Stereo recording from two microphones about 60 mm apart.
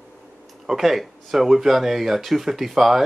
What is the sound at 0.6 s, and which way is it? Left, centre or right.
Speech, centre.